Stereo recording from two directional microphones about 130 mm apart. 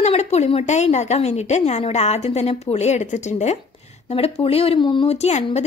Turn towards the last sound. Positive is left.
turn(degrees=60)  # may be behind; listen again after turning